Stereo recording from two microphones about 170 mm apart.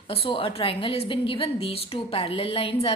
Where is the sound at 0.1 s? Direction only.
35° left (ahead or behind).